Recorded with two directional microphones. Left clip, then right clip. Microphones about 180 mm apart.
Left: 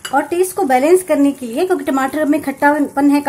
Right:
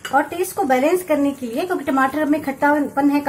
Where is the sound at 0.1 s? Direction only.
45° left (ahead or behind).